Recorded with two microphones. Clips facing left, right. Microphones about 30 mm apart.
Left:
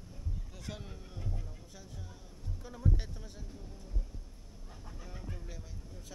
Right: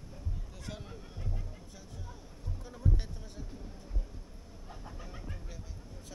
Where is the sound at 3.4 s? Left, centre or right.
Centre.